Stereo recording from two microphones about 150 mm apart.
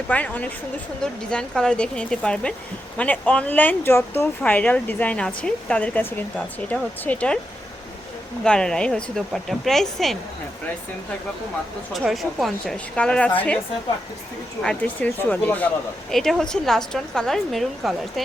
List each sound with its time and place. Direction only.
0.1 s speech: 10° left (ahead or behind)
8.4 s a woman's voice: 5° left (ahead or behind)
11.9 s a woman's voice: centre (ahead or behind)
14.6 s a woman's voice: 5° left (ahead or behind)